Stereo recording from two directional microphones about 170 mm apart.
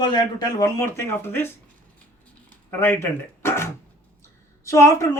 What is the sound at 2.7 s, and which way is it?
Speech, 10° left (ahead or behind).